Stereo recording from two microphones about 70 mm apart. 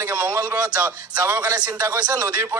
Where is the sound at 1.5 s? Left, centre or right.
Right.